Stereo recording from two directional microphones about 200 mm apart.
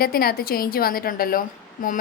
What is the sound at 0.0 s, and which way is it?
A woman's voice, 50° left (ahead or behind).